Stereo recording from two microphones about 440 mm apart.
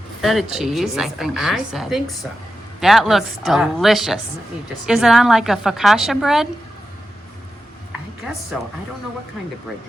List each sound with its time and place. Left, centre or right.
0.2 s a woman's voice: centre
8.2 s speech: centre